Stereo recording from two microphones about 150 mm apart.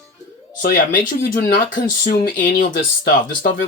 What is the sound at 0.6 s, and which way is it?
Speech, 65° left (ahead or behind).